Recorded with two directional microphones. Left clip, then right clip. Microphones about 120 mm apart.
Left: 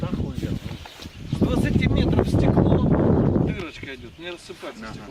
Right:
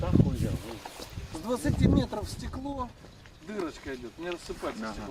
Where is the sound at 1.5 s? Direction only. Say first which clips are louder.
Left 1 dB; 55° left (ahead or behind).